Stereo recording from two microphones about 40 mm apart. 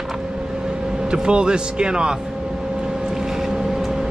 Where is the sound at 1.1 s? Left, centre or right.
Right.